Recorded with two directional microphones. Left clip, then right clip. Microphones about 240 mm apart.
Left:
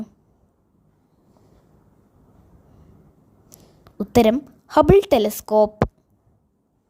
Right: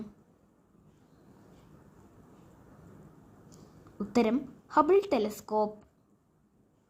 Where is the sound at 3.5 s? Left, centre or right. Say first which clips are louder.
Left 8 dB; left.